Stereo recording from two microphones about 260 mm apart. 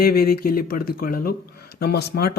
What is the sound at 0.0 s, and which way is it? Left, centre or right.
Speech, left.